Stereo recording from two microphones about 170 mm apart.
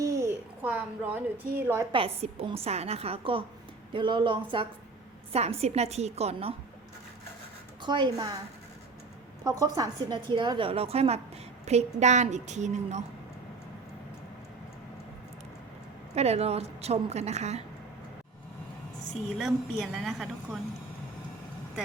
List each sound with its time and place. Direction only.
0.0 s a sound: 15° right (ahead or behind)
1.5 s a woman's voice: 15° right (ahead or behind)
1.9 s a woman's voice: 35° right (ahead or behind)
7.8 s a woman's voice: 25° right (ahead or behind)
9.4 s a woman's voice: 20° right (ahead or behind); by 13.1 s 40° right (ahead or behind)
16.1 s a woman's voice: 40° right (ahead or behind)
19.4 s a woman's voice: centre (ahead or behind)